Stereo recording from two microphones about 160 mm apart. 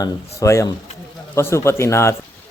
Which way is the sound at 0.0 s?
20° left (ahead or behind).